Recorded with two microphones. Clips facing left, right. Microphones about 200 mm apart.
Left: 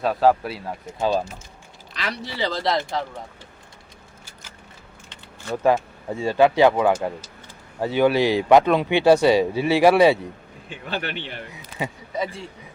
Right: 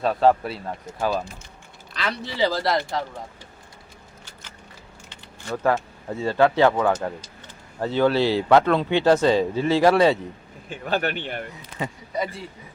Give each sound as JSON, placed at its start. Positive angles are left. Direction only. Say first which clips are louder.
{"t": 0.0, "sound": "speech", "louder": "even", "side_deg": 5}
{"t": 0.9, "sound": "speech", "louder": "left 3 dB", "side_deg": 25}
{"t": 2.4, "sound": "speech", "louder": "right 2 dB", "side_deg": -5}
{"t": 5.0, "sound": "speech", "louder": "left 2 dB", "side_deg": 15}
{"t": 10.7, "sound": "speech", "louder": "right 5 dB", "side_deg": -45}
{"t": 11.8, "sound": "speech", "louder": "left 1 dB", "side_deg": 0}